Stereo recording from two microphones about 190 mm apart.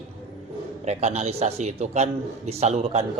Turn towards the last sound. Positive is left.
turn(degrees=-35)  # may be behind; listen again after turning